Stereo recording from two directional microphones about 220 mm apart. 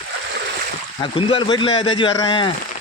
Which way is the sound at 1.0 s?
25° left (ahead or behind).